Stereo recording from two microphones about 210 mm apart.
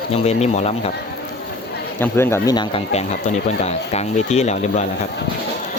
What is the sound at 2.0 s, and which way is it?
Speech, 10° left (ahead or behind).